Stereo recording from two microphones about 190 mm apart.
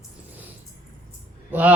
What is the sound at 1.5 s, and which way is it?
Speech, 10° right (ahead or behind).